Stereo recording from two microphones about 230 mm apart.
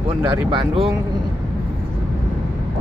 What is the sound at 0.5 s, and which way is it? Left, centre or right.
Speech, right.